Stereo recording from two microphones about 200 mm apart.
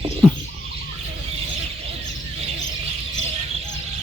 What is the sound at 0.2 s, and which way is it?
Bird, 5° right (ahead or behind).